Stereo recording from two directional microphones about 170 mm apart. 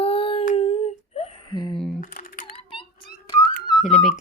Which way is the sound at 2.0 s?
50° left (ahead or behind).